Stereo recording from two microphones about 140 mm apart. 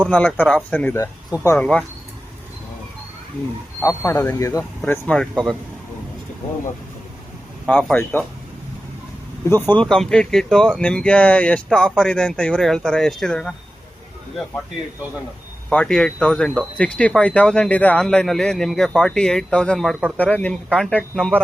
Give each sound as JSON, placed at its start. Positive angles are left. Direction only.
{"t": 0.1, "sound": "speech", "side_deg": 10}
{"t": 3.8, "sound": "speech", "side_deg": 20}
{"t": 4.9, "sound": "speech", "side_deg": 5}
{"t": 7.7, "sound": "speech", "side_deg": 10}
{"t": 9.4, "sound": "speech", "side_deg": 15}
{"t": 15.7, "sound": "speech", "side_deg": 5}